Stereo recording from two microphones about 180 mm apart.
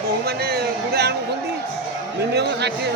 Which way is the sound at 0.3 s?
60° right (ahead or behind).